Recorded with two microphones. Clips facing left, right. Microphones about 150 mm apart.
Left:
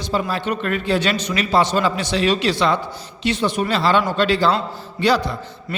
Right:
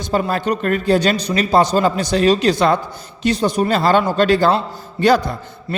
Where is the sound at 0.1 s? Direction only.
50° right (ahead or behind).